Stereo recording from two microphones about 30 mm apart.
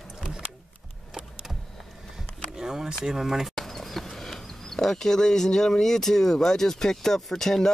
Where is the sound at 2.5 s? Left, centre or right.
Right.